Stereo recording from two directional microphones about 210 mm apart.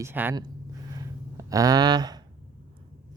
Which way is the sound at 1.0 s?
15° right (ahead or behind).